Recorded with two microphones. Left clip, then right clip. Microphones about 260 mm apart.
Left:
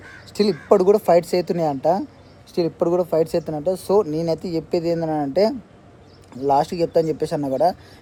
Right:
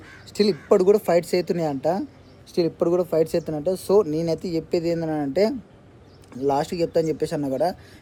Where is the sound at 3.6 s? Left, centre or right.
Centre.